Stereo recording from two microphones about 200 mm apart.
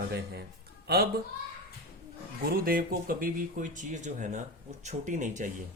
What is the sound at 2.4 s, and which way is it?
Speech, 45° right (ahead or behind).